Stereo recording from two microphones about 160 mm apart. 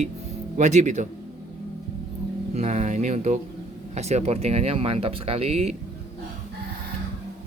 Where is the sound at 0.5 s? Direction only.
50° right (ahead or behind).